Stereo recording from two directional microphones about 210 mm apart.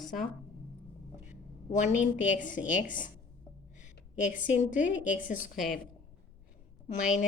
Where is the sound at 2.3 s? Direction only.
35° left (ahead or behind).